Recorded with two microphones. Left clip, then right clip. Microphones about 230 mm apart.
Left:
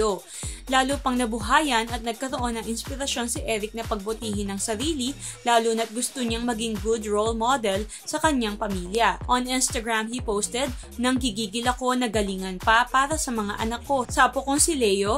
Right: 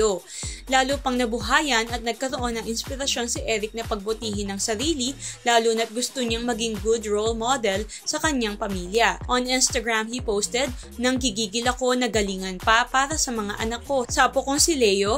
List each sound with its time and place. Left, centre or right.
0.7 s a woman's voice: centre